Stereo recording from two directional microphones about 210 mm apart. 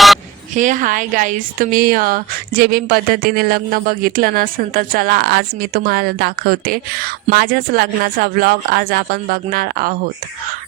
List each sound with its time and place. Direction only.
0.5 s a woman's voice: 35° right (ahead or behind)